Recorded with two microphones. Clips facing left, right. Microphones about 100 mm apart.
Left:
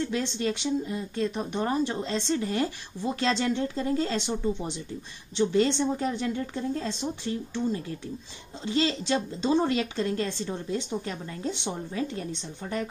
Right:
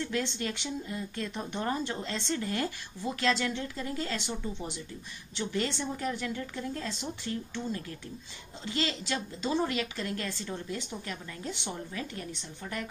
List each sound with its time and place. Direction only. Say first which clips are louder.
0.1 s speech: left 4 dB; 25° left (ahead or behind)
5.4 s speech: left 9 dB; 30° left (ahead or behind)
8.6 s speech: left 7 dB; 25° left (ahead or behind)